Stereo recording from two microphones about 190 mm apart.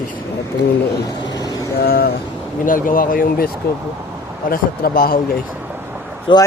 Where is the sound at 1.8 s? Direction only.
50° left (ahead or behind).